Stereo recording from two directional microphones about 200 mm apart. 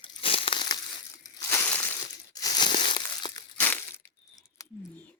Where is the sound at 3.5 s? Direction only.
10° left (ahead or behind).